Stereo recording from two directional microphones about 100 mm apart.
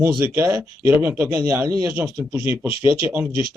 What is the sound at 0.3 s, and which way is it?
A man's voice, 25° right (ahead or behind).